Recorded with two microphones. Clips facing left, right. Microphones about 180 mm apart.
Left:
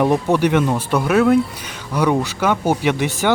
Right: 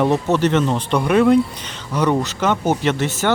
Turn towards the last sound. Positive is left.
turn(degrees=15)  # may be behind; listen again after turning